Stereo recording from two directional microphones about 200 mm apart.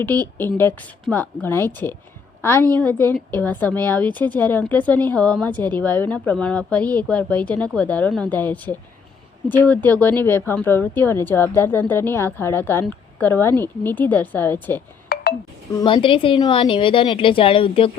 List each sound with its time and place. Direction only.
0.0 s a woman's voice: 10° left (ahead or behind)
15.1 s music: 55° left (ahead or behind)
15.7 s a woman's voice: 25° left (ahead or behind)